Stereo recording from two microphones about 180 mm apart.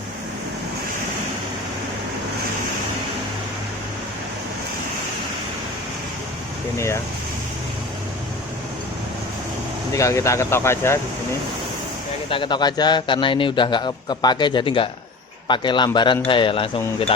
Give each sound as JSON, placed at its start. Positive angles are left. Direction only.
{"t": 6.7, "sound": "speech", "side_deg": 15}
{"t": 9.9, "sound": "speech", "side_deg": 15}
{"t": 12.3, "sound": "a man's voice", "side_deg": 25}